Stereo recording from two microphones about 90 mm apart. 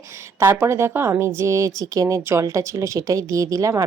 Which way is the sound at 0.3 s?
25° right (ahead or behind).